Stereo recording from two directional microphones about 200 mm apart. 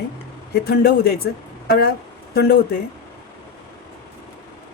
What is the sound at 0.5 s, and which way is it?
Speech, 50° left (ahead or behind).